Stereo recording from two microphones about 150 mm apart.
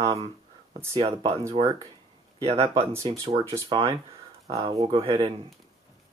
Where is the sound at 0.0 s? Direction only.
45° right (ahead or behind).